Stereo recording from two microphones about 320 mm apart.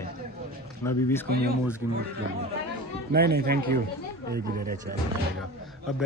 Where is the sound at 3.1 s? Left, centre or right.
Right.